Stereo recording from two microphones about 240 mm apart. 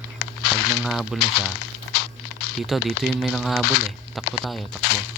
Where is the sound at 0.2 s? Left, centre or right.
Left.